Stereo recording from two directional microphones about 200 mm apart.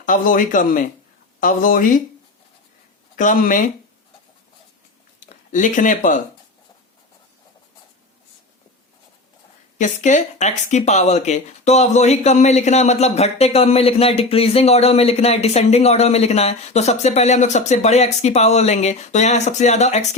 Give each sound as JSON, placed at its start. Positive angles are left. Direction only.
{"t": 0.0, "sound": "speech", "side_deg": 40}
{"t": 3.2, "sound": "speech", "side_deg": 40}
{"t": 5.2, "sound": "speech", "side_deg": 40}
{"t": 9.7, "sound": "speech", "side_deg": 40}